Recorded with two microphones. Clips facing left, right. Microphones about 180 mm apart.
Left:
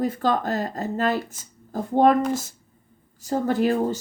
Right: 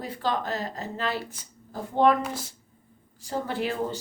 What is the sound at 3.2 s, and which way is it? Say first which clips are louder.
Speech: left 7 dB; 45° left (ahead or behind).